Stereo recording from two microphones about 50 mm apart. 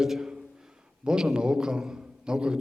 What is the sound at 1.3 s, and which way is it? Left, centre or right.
A man's voice, centre.